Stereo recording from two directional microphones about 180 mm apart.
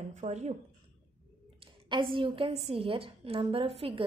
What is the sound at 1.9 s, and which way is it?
A woman's voice, 30° right (ahead or behind).